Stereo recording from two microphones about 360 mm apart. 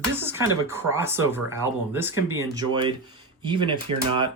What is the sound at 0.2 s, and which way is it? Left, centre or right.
Speech, centre.